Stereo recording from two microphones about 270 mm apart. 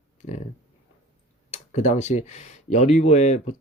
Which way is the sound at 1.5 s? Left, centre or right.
Left.